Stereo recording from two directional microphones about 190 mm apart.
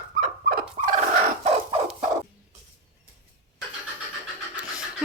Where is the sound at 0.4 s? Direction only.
50° right (ahead or behind).